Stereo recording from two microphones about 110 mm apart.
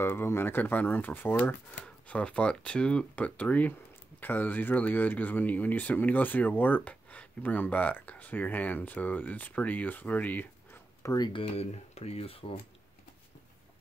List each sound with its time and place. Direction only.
0.0 s speech: 20° left (ahead or behind)
11.0 s speech: 30° left (ahead or behind)
11.3 s speech: 65° left (ahead or behind)